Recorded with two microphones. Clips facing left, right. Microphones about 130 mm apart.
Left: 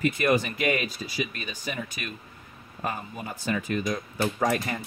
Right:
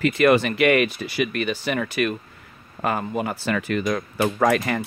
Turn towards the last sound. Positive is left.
turn(degrees=-90)